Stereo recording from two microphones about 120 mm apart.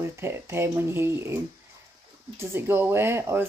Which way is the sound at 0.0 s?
20° right (ahead or behind).